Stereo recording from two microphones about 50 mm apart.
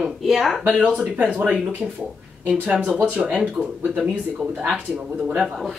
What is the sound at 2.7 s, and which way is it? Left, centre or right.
Speech, right.